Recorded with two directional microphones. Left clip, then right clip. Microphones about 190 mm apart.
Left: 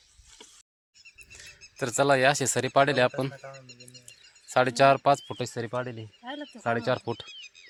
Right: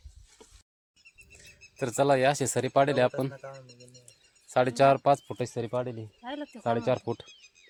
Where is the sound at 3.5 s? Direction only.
5° right (ahead or behind).